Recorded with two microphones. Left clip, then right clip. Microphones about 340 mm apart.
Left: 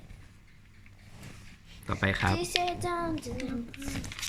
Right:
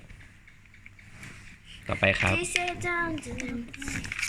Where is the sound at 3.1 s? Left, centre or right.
Left.